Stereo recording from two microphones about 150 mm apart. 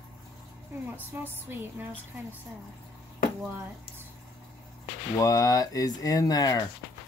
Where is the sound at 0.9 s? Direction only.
15° right (ahead or behind).